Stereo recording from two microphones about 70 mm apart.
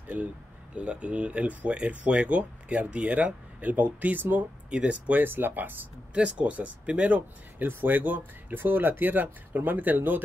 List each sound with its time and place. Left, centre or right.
0.1 s speech: right
6.1 s speech: centre